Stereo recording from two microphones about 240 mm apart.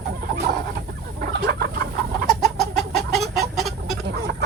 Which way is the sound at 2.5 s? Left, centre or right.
Centre.